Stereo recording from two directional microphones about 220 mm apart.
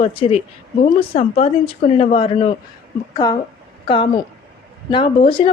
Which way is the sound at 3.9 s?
25° left (ahead or behind).